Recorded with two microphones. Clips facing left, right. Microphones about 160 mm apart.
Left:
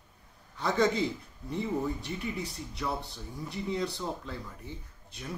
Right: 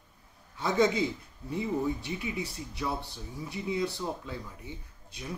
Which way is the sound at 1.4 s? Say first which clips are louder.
Right 1 dB; 5° right (ahead or behind).